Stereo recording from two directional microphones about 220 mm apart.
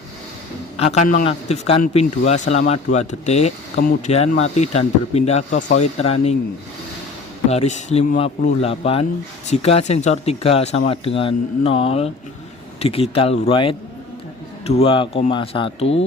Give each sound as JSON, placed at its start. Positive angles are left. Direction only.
{"t": 0.8, "sound": "a man's voice", "side_deg": 30}
{"t": 7.5, "sound": "speech", "side_deg": 30}